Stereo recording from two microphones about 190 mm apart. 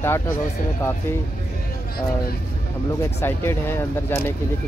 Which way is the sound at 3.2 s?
15° left (ahead or behind).